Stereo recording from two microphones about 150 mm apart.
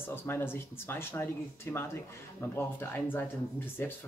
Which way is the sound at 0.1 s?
15° left (ahead or behind).